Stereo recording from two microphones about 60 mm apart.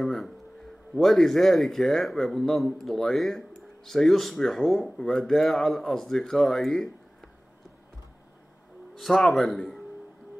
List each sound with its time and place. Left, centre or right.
0.0 s speech: centre
8.9 s speech: centre